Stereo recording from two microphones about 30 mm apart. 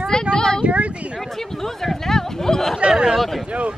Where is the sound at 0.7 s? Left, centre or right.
Right.